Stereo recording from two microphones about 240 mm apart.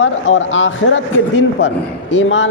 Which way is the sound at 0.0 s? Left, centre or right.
Left.